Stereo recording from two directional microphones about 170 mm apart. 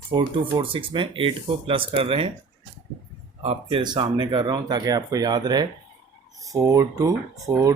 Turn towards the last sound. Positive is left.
turn(degrees=-20)  # may be behind; listen again after turning